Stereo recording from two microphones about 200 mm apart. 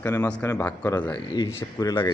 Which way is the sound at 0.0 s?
10° left (ahead or behind).